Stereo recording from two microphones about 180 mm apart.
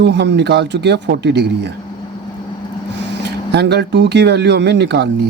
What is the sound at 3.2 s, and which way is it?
A man's voice, 70° right (ahead or behind).